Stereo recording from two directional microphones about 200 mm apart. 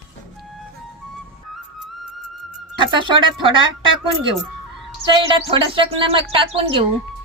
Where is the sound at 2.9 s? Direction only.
25° right (ahead or behind).